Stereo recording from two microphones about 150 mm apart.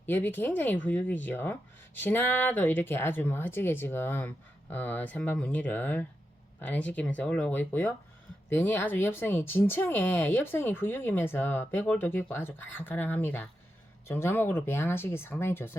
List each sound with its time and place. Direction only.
0.0 s speech: 15° left (ahead or behind)